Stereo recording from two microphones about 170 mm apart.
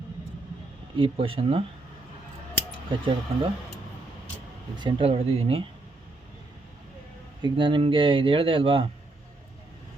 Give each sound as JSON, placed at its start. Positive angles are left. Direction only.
{"t": 0.9, "sound": "speech", "side_deg": -30}
{"t": 2.9, "sound": "speech", "side_deg": -30}
{"t": 4.8, "sound": "speech", "side_deg": -30}
{"t": 7.4, "sound": "speech", "side_deg": -30}